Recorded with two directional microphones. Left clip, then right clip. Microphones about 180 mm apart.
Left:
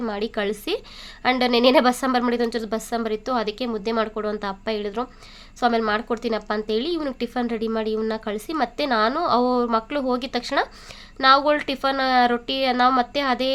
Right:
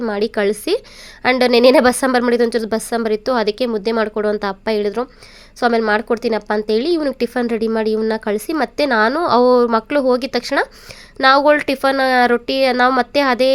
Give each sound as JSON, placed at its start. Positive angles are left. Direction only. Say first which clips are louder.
{"t": 0.0, "sound": "speech", "louder": "right 8 dB", "side_deg": -30}